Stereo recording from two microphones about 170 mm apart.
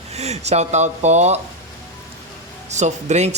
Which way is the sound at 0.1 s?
40° right (ahead or behind).